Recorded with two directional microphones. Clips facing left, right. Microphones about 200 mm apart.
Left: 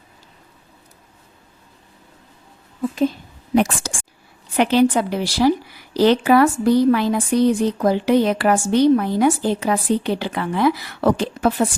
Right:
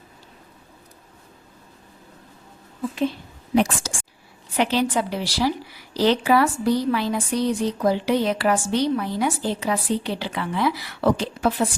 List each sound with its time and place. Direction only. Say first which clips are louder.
3.5 s a woman's voice: left 2 dB; 55° left (ahead or behind)